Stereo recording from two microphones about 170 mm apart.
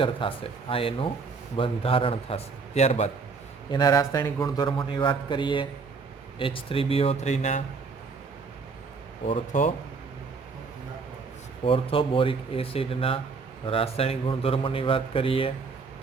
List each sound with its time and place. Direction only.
0.0 s speech: 30° left (ahead or behind)
3.7 s a man's voice: 25° left (ahead or behind); by 7.6 s 45° left (ahead or behind)
9.5 s speech: 50° left (ahead or behind)
11.6 s speech: 30° left (ahead or behind)